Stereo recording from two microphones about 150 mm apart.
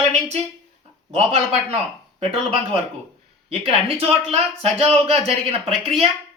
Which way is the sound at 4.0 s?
40° right (ahead or behind).